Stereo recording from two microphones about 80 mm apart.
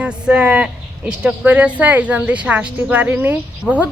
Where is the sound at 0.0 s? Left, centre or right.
Centre.